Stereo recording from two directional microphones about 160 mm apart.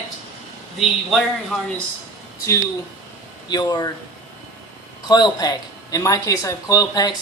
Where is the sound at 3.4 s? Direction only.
25° left (ahead or behind).